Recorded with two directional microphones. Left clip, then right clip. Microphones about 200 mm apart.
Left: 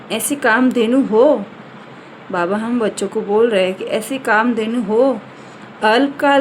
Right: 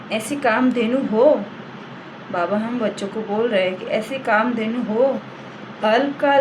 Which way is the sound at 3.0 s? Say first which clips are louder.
Left 7 dB; 60° left (ahead or behind).